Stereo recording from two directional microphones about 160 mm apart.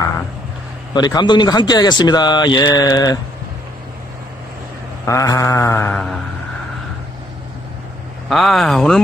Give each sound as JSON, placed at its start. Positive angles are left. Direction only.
{"t": 0.9, "sound": "speech", "side_deg": 25}
{"t": 5.0, "sound": "mantra", "side_deg": 20}
{"t": 8.3, "sound": "speech", "side_deg": 0}